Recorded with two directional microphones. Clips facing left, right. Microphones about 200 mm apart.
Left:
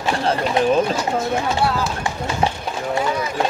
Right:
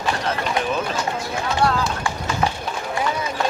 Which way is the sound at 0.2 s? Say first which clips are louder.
Left 5 dB; 30° left (ahead or behind).